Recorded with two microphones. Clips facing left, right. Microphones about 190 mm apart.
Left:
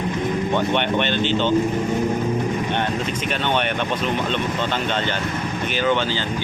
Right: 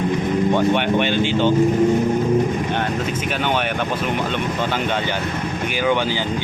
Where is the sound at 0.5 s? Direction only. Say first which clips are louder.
Right 2 dB; 10° right (ahead or behind).